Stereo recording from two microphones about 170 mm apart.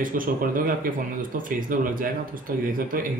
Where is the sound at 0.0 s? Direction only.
55° right (ahead or behind).